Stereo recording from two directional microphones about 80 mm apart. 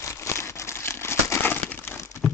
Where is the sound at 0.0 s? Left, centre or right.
Left.